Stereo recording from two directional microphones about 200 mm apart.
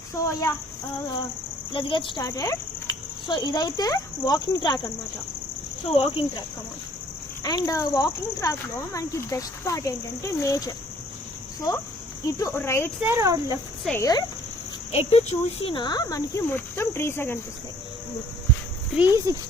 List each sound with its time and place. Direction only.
0.2 s speech: 15° left (ahead or behind)
1.7 s speech: 25° left (ahead or behind)
5.9 s speech: 30° left (ahead or behind)
7.4 s speech: 20° left (ahead or behind)
12.2 s speech: 15° left (ahead or behind)
13.0 s speech: 15° right (ahead or behind)
13.8 s speech: 15° left (ahead or behind)
14.9 s speech: 35° left (ahead or behind); by 17.3 s 10° left (ahead or behind)
18.9 s speech: 10° right (ahead or behind)